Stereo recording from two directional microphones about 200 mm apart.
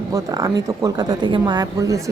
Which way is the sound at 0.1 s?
15° right (ahead or behind).